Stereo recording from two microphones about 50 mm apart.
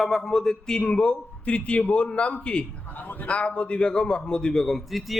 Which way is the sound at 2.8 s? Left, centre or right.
Left.